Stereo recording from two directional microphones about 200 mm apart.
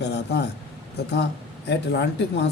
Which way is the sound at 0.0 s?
55° left (ahead or behind).